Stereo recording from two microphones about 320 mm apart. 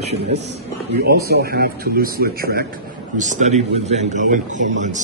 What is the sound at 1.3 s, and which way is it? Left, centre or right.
A man's voice, right.